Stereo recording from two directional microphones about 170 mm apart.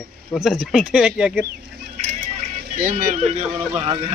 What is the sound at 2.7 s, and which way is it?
Speech, 50° right (ahead or behind).